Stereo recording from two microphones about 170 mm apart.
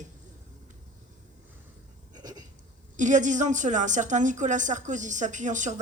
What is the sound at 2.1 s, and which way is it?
Hiccup, 25° right (ahead or behind).